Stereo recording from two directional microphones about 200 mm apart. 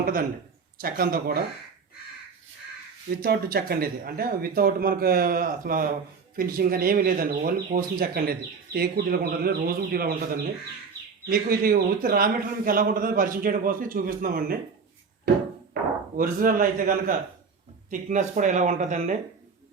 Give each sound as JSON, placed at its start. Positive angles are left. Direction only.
{"t": 0.0, "sound": "speech", "side_deg": -45}
{"t": 3.2, "sound": "speech", "side_deg": -50}
{"t": 11.3, "sound": "speech", "side_deg": -45}
{"t": 16.1, "sound": "speech", "side_deg": -45}